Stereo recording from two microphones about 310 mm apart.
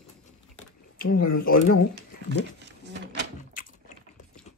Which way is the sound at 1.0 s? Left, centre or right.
Left.